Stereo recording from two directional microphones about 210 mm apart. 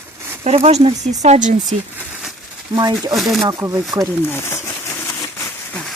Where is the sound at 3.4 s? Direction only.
15° right (ahead or behind).